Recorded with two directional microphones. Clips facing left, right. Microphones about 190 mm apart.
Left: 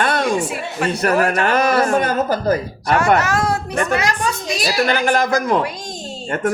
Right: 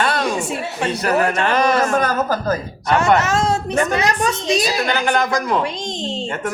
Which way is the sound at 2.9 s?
25° right (ahead or behind).